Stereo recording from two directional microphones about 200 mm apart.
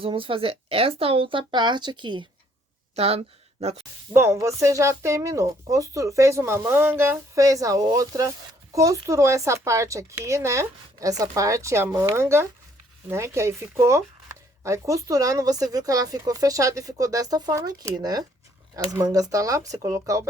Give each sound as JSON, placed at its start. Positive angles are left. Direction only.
{"t": 0.0, "sound": "a woman's voice", "side_deg": -25}
{"t": 4.1, "sound": "speech", "side_deg": -15}